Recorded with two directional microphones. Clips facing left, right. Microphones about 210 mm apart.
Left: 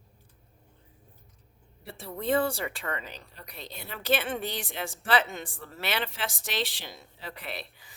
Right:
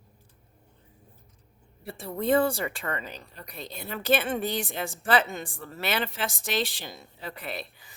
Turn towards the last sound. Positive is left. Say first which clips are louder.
# right 3 dB
turn(degrees=-45)  # may be behind; listen again after turning